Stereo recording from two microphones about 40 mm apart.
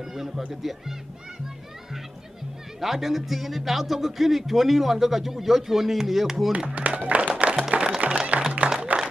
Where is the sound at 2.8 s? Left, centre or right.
Centre.